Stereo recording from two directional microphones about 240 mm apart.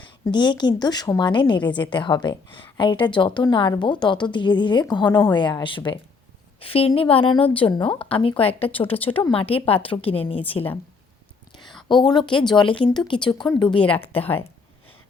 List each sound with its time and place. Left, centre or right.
0.0 s a woman's voice: centre
11.9 s a woman's voice: centre